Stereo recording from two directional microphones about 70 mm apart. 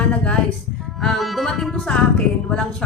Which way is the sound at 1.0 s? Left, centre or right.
Centre.